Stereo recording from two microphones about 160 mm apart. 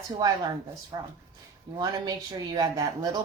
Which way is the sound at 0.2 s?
25° right (ahead or behind).